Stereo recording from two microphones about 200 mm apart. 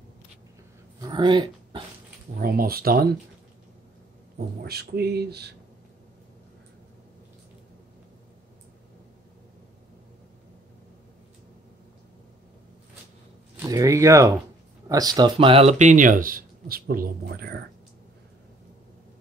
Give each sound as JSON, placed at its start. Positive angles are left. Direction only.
{"t": 1.0, "sound": "speech", "side_deg": -25}
{"t": 2.4, "sound": "speech", "side_deg": -45}
{"t": 4.6, "sound": "speech", "side_deg": -55}
{"t": 13.6, "sound": "speech", "side_deg": -15}